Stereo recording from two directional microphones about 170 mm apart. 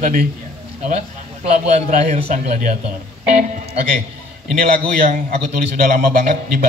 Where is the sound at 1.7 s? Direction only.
45° right (ahead or behind).